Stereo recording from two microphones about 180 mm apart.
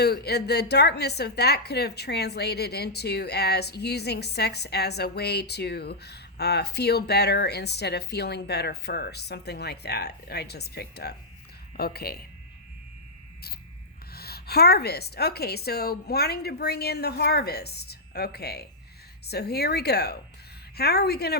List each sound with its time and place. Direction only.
0.0 s a woman's voice: 65° left (ahead or behind)
14.1 s a woman's voice: 60° left (ahead or behind)